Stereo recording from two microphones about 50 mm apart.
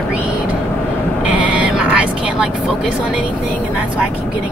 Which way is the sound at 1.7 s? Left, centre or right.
Centre.